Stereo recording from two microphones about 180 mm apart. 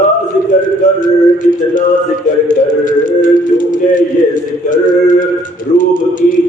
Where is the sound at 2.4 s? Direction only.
45° left (ahead or behind).